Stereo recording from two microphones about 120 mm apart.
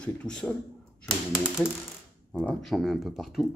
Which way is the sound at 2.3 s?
10° left (ahead or behind).